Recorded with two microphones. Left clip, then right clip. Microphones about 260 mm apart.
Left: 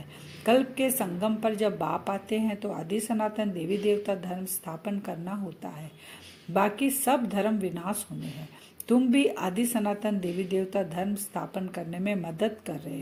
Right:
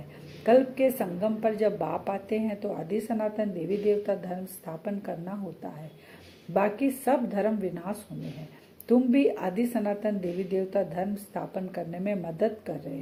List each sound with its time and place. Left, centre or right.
0.4 s a woman's voice: left